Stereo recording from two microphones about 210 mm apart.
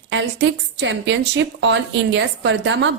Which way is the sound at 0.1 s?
65° right (ahead or behind).